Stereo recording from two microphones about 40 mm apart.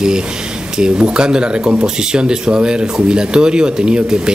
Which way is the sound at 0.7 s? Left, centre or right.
Right.